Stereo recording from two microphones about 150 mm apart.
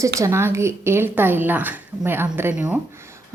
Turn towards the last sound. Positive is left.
turn(degrees=-20)  # may be behind; listen again after turning